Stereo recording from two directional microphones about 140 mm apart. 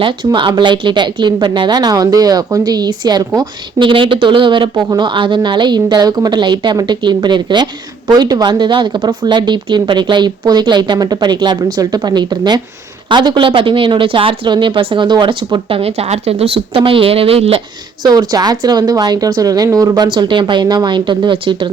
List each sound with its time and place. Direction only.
0.0 s a woman's voice: 35° right (ahead or behind)
18.0 s speech: 30° right (ahead or behind)
20.1 s a woman's voice: 35° right (ahead or behind)